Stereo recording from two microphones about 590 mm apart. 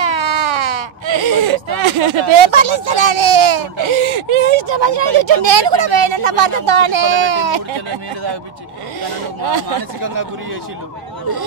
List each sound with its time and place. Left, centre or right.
0.0 s speech: right
9.4 s speech: right
9.7 s speech: right